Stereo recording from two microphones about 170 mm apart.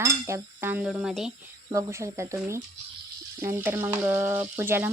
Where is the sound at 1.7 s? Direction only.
15° right (ahead or behind).